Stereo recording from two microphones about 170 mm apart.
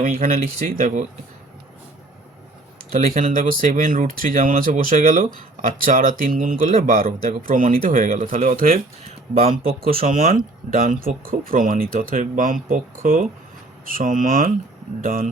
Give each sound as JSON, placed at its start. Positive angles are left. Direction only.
{"t": 0.0, "sound": "speech", "side_deg": -50}
{"t": 3.0, "sound": "speech", "side_deg": -55}
{"t": 9.4, "sound": "speech", "side_deg": -35}
{"t": 9.8, "sound": "speech", "side_deg": -60}